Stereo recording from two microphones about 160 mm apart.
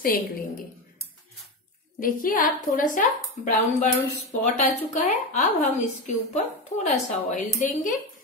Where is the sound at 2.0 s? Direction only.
60° left (ahead or behind).